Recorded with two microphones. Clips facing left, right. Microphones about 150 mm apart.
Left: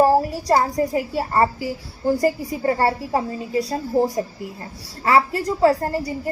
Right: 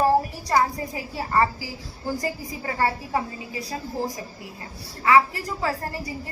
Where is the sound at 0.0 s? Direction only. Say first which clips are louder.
Left 4 dB; 35° left (ahead or behind).